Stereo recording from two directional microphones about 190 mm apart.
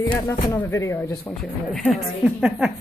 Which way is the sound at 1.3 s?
Centre (ahead or behind).